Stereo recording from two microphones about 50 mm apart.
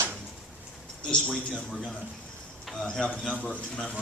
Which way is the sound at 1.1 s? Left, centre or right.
Centre.